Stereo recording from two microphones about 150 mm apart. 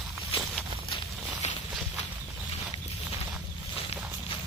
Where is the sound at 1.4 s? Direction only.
50° left (ahead or behind).